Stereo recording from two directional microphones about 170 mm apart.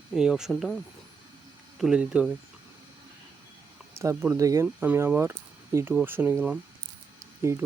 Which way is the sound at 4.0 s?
15° right (ahead or behind).